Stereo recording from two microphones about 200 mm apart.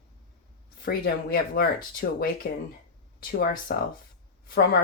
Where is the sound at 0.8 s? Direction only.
50° left (ahead or behind).